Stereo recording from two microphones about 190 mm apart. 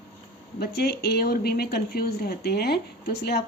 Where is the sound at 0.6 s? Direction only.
55° left (ahead or behind).